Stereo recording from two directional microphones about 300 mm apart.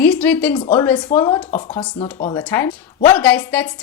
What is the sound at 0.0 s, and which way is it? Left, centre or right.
A woman's voice, centre.